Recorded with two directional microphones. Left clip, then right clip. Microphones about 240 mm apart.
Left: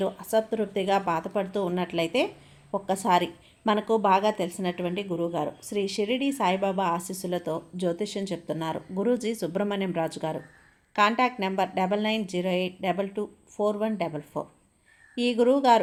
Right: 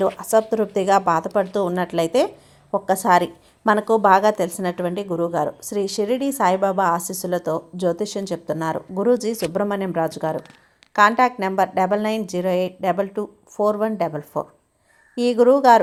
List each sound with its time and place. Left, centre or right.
0.0 s a woman's voice: right